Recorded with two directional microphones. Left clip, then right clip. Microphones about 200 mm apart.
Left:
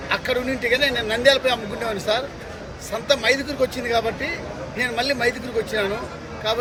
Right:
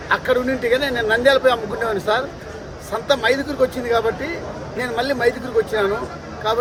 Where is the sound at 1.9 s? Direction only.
15° right (ahead or behind).